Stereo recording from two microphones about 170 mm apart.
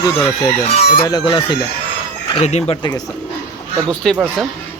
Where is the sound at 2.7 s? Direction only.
25° left (ahead or behind).